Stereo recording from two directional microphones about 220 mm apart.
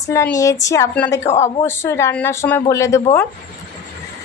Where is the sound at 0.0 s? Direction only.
15° left (ahead or behind).